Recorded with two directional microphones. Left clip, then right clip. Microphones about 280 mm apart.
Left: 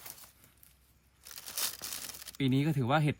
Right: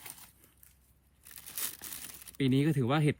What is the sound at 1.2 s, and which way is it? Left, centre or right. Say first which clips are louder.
Crumpling: left 5 dB; left.